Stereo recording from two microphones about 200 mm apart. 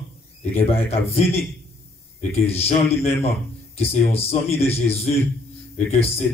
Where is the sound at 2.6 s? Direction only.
30° left (ahead or behind).